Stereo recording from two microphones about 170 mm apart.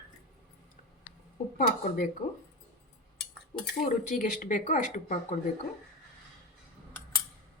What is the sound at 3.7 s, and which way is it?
Speech, 50° left (ahead or behind).